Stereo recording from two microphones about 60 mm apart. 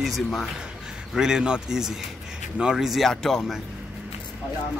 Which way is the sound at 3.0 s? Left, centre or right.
Centre.